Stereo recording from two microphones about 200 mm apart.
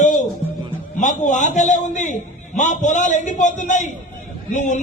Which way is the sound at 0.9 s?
40° left (ahead or behind).